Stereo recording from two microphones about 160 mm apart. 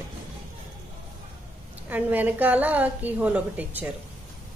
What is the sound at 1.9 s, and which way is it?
A woman's voice, 10° right (ahead or behind).